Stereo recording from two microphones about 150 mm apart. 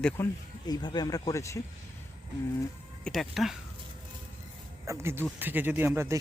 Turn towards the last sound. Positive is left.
turn(degrees=-15)  # may be behind; listen again after turning